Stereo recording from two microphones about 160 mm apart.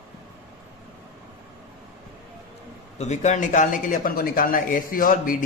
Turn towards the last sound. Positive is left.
turn(degrees=60)  # may be behind; listen again after turning